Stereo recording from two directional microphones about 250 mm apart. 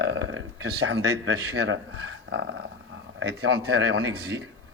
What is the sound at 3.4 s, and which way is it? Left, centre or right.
Speech, right.